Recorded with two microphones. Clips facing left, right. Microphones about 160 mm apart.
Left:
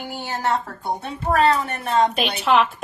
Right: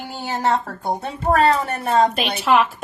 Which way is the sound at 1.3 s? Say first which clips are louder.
Right 2 dB; 35° right (ahead or behind).